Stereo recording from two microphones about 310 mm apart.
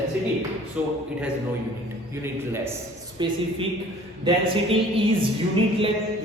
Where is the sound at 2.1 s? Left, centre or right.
Centre.